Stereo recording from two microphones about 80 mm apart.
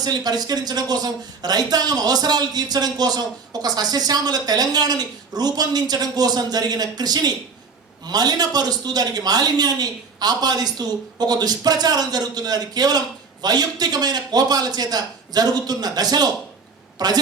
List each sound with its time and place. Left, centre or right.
0.0 s speech: right